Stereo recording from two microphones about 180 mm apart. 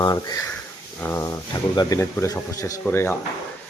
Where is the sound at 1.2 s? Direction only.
20° left (ahead or behind).